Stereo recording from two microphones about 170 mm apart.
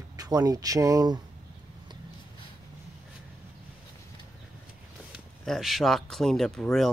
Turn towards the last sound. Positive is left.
turn(degrees=0)  # may be behind; listen again after turning